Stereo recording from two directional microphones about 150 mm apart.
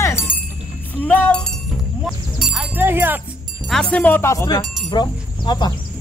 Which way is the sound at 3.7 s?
5° left (ahead or behind).